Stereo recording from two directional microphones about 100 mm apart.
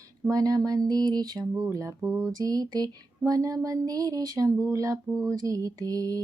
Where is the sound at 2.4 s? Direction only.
40° right (ahead or behind).